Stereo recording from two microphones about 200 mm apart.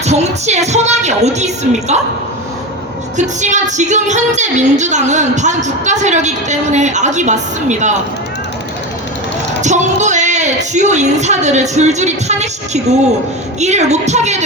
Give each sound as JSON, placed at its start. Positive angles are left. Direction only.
{"t": 0.0, "sound": "a woman's voice", "side_deg": -35}
{"t": 3.2, "sound": "a woman's voice", "side_deg": -35}
{"t": 9.6, "sound": "a woman's voice", "side_deg": -35}